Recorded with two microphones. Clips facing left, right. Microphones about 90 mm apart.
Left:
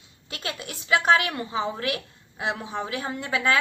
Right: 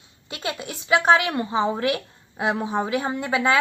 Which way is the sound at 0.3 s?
25° right (ahead or behind).